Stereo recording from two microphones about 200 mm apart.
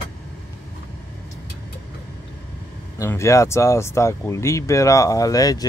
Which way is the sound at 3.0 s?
15° left (ahead or behind).